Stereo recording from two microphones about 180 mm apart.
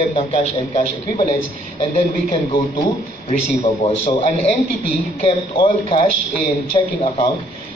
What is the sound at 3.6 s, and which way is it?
Speech, 35° left (ahead or behind).